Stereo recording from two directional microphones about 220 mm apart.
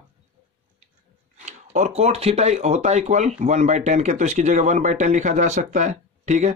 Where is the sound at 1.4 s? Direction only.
35° right (ahead or behind).